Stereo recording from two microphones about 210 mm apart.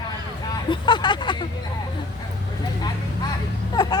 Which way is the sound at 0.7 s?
20° left (ahead or behind).